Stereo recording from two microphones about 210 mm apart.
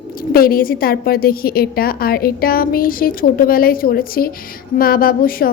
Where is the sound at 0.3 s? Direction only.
45° left (ahead or behind).